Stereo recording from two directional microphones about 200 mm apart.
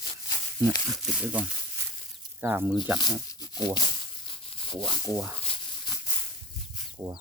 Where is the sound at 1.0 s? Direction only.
5° right (ahead or behind).